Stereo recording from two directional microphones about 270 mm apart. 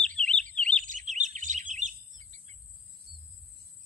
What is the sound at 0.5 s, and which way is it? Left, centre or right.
Chirp, centre.